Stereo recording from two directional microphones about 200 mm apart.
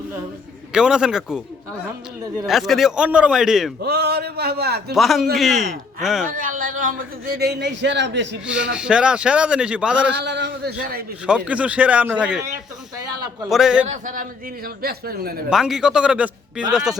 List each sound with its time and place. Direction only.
0.7 s a man's voice: 5° right (ahead or behind)
2.5 s a man's voice: centre (ahead or behind)
3.8 s a man's voice: 55° right (ahead or behind)
4.9 s a man's voice: centre (ahead or behind)
6.2 s a man's voice: 40° right (ahead or behind); by 8.4 s 60° right (ahead or behind)
8.4 s a man's voice: 5° right (ahead or behind)
10.2 s a man's voice: 60° right (ahead or behind)
11.3 s speech: 5° right (ahead or behind)
13.5 s a man's voice: 5° right (ahead or behind)
13.8 s a man's voice: 40° right (ahead or behind)
15.4 s a man's voice: 5° right (ahead or behind)